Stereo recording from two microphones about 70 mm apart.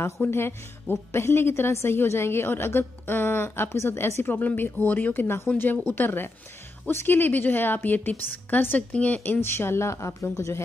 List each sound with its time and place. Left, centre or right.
0.0 s a woman's voice: left